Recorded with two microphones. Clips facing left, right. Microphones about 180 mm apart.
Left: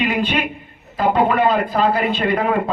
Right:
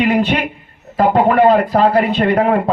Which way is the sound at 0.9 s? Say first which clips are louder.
Right 4 dB; 60° right (ahead or behind).